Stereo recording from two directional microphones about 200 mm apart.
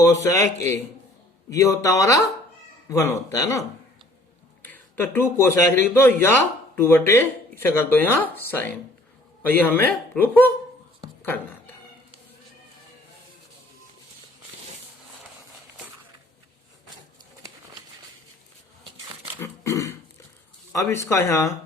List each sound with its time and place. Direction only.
0.0 s speech: 15° left (ahead or behind)
1.5 s speech: 15° left (ahead or behind)
11.2 s a sound: 10° left (ahead or behind)
19.4 s burping: 15° left (ahead or behind)
20.7 s speech: 15° left (ahead or behind)